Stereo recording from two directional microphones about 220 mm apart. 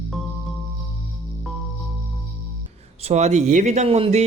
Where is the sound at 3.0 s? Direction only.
30° right (ahead or behind).